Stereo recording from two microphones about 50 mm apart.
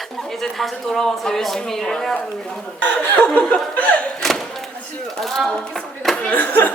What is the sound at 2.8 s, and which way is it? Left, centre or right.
Speech, left.